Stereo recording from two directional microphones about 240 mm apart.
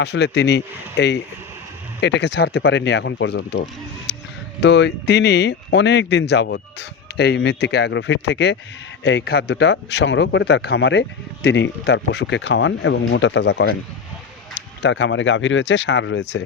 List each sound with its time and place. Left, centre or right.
0.0 s speech: left
4.1 s a sound: left
4.6 s speech: left
14.8 s speech: left